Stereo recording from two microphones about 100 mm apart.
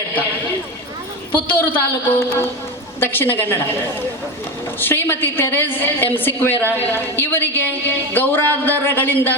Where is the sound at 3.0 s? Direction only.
20° left (ahead or behind).